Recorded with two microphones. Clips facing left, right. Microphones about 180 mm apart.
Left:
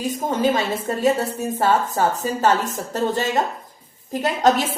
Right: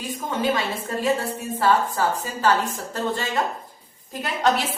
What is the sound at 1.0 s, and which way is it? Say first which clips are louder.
A woman's voice: left 4 dB; 40° left (ahead or behind).